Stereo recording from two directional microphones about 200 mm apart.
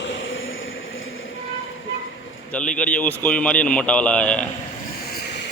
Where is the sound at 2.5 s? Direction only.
5° left (ahead or behind).